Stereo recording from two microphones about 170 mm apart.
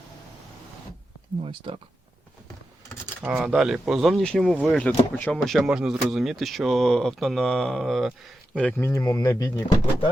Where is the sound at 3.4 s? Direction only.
5° right (ahead or behind); by 9.6 s 15° left (ahead or behind).